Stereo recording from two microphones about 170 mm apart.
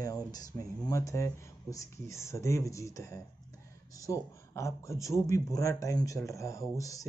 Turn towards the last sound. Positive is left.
turn(degrees=20)  # may be behind; listen again after turning